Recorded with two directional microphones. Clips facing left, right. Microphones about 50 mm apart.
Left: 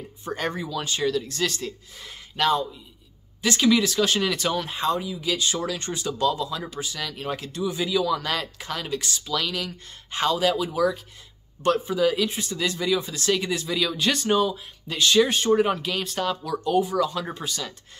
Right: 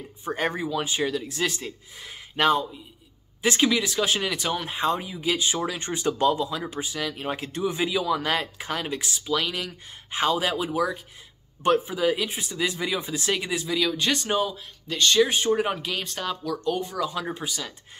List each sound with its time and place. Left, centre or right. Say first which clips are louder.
0.2 s speech: right 2 dB; centre
2.3 s speech: right 1 dB; right
3.7 s speech: left 3 dB; centre
4.9 s speech: even; right
6.0 s speech: right 2 dB; right
6.4 s speech: right 1 dB; centre